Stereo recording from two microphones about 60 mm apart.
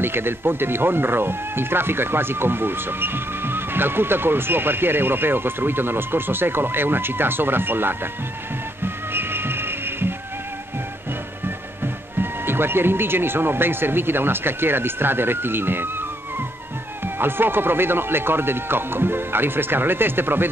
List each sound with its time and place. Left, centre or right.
0.0 s speech: right
8.8 s music: right
11.4 s speech: right